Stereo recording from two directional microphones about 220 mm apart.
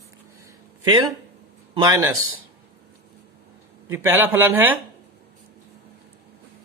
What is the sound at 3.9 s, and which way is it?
Speech, 10° right (ahead or behind).